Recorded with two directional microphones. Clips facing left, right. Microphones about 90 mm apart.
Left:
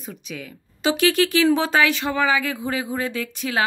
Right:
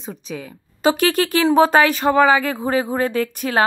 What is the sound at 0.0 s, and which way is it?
Speech, 35° right (ahead or behind).